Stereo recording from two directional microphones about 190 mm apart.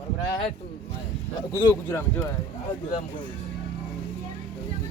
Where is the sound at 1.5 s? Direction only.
15° left (ahead or behind).